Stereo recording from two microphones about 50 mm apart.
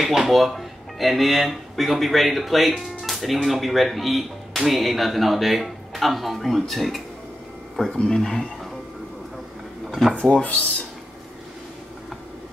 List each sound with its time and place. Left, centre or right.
0.0 s speech: centre
9.8 s drawer open or close: centre
10.3 s speech: left